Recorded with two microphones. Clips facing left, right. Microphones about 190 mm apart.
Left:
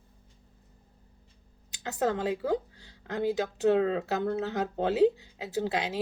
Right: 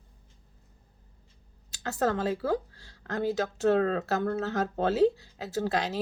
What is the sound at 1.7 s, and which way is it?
Speech, 15° left (ahead or behind).